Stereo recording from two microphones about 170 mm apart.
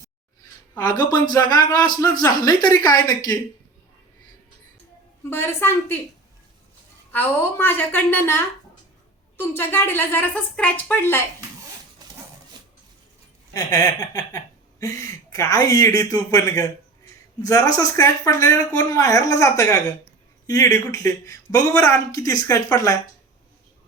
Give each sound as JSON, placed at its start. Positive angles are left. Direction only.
{"t": 0.8, "sound": "speech", "side_deg": 25}
{"t": 5.3, "sound": "speech", "side_deg": 15}
{"t": 7.1, "sound": "speech", "side_deg": 10}
{"t": 9.4, "sound": "speech", "side_deg": 15}
{"t": 13.5, "sound": "speech", "side_deg": 25}